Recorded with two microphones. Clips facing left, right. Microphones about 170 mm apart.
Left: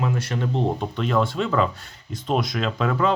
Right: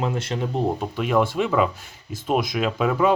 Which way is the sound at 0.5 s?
5° right (ahead or behind).